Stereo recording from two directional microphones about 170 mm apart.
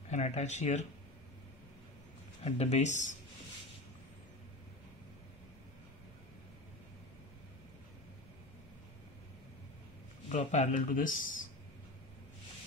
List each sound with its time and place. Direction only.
0.1 s speech: 40° left (ahead or behind)
2.4 s speech: 40° left (ahead or behind)
10.5 s speech: 45° left (ahead or behind)